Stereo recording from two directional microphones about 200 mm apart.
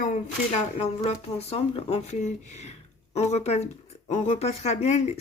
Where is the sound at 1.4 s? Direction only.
30° left (ahead or behind).